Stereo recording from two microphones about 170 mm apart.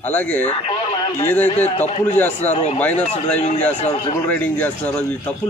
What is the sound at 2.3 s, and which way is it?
Speech, 40° left (ahead or behind).